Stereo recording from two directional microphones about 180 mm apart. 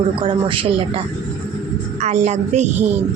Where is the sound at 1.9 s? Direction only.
40° right (ahead or behind).